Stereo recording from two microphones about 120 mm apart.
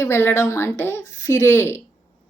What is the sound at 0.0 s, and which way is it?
A woman's voice, 20° left (ahead or behind).